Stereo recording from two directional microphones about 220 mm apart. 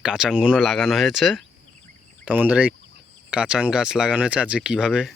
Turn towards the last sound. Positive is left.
turn(degrees=-5)  # may be behind; listen again after turning